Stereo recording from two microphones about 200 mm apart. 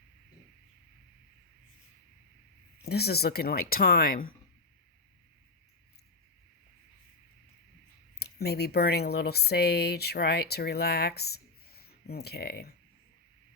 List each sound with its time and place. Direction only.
2.8 s speech: 55° left (ahead or behind)
8.2 s speech: 55° left (ahead or behind)